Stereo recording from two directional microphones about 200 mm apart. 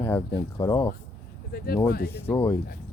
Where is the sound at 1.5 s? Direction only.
50° left (ahead or behind).